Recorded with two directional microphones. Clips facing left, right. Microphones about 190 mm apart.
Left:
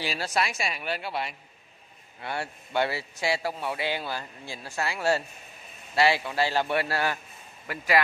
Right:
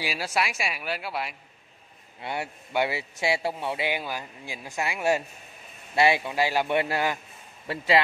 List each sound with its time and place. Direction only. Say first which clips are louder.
0.0 s a man's voice: even; 10° right (ahead or behind)
2.2 s a man's voice: right 1 dB; 15° right (ahead or behind)